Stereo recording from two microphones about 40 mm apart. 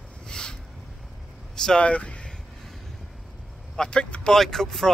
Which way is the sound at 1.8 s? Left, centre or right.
Left.